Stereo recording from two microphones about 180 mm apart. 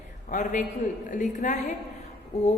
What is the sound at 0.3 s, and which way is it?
Speech, 45° left (ahead or behind).